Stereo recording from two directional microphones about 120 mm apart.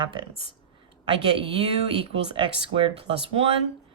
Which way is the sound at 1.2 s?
50° right (ahead or behind).